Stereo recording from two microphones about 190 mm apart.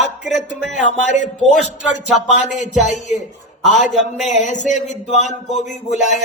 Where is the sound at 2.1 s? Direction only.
40° left (ahead or behind).